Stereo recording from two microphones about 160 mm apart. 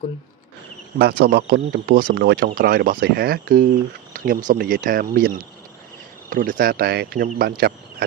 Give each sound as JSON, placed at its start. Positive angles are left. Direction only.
{"t": 0.9, "sound": "speech", "side_deg": -75}
{"t": 4.5, "sound": "speech", "side_deg": -75}